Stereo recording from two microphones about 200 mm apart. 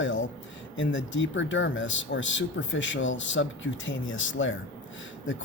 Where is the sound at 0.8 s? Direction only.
65° left (ahead or behind).